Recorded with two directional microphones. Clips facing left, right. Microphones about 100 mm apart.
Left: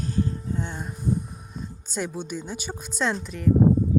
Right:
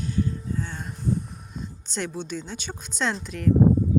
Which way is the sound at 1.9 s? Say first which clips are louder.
Left 1 dB; 10° left (ahead or behind).